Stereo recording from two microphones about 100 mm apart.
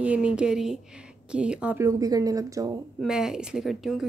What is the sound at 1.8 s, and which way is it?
Speech, 35° right (ahead or behind).